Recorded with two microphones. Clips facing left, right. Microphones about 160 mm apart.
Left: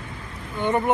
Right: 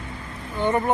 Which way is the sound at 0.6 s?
15° left (ahead or behind).